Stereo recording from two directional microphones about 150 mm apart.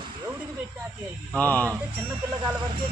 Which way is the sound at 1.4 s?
10° left (ahead or behind).